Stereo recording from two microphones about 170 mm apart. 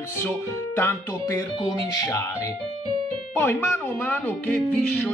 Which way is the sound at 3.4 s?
10° left (ahead or behind).